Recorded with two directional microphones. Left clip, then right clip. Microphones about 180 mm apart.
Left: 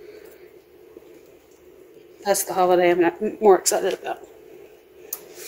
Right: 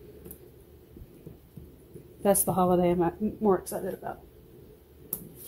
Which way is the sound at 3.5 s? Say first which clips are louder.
Left 11 dB; 55° left (ahead or behind).